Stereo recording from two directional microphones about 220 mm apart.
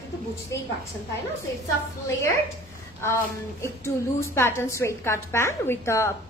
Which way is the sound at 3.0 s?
10° left (ahead or behind).